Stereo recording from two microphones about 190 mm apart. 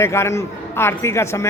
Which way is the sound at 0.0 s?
15° left (ahead or behind).